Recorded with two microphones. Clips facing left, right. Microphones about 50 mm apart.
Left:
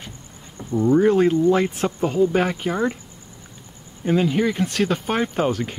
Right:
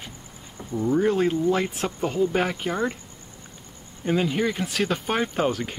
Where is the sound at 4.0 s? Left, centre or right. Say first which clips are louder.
Left 4 dB; centre.